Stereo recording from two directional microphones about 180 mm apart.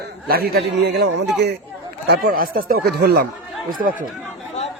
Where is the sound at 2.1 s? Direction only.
55° right (ahead or behind).